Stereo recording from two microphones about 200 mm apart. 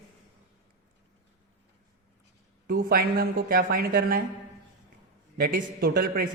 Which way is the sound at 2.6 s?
45° right (ahead or behind).